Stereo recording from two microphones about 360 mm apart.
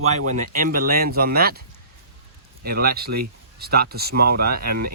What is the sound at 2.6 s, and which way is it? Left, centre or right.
Speech, right.